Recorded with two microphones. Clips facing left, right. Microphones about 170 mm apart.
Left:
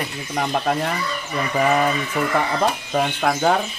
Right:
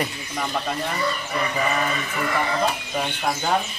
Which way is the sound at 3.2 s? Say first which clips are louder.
Left 3 dB; 80° left.